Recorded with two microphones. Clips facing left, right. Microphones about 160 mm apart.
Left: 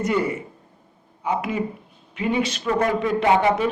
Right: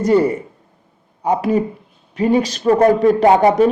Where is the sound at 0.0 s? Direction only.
35° right (ahead or behind).